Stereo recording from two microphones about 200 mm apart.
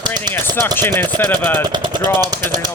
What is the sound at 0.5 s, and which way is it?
Speech, 10° left (ahead or behind).